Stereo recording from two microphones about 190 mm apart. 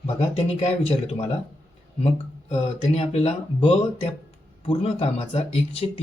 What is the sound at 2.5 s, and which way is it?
A man's voice, 30° left (ahead or behind).